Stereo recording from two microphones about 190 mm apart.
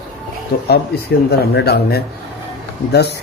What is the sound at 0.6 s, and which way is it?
A man's voice, 55° left (ahead or behind).